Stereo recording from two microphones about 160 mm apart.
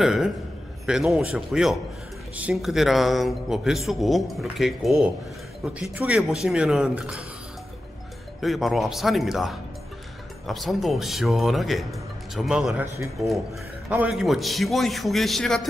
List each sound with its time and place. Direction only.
0.0 s speech: 5° right (ahead or behind)
8.4 s speech: centre (ahead or behind)
12.8 s a man's voice: 20° right (ahead or behind)
13.8 s speech: 10° right (ahead or behind)